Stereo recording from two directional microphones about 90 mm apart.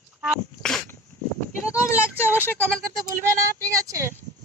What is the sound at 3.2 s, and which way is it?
Speech, 35° right (ahead or behind).